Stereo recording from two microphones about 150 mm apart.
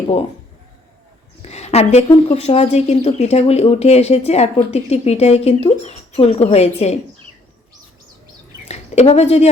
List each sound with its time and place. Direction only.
1.4 s a woman's voice: 45° left (ahead or behind)
8.6 s speech: 45° left (ahead or behind)